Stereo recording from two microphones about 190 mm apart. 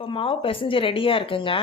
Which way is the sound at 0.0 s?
30° left (ahead or behind).